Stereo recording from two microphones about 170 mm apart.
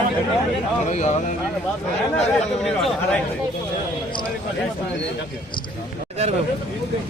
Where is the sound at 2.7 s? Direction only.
Centre (ahead or behind).